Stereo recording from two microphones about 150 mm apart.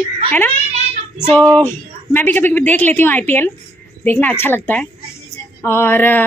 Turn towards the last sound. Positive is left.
turn(degrees=15)  # may be behind; listen again after turning